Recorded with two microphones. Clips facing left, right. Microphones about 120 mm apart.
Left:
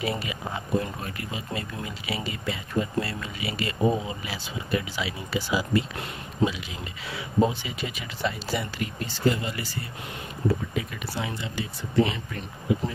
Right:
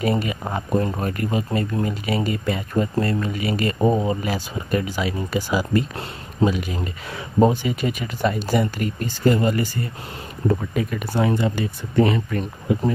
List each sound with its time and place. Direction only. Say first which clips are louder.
0.0 s speech: right 7 dB; 45° right (ahead or behind)